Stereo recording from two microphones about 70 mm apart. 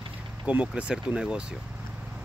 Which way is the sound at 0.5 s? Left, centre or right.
Centre.